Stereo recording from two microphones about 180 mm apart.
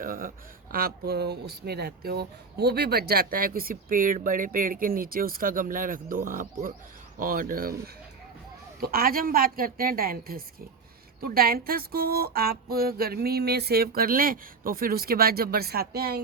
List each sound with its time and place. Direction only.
0.0 s speech: 50° right (ahead or behind)
8.8 s speech: 55° right (ahead or behind)
11.2 s a sound: 55° right (ahead or behind)